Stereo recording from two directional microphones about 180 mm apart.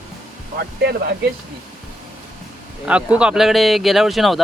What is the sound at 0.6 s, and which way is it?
Speech, 60° right (ahead or behind).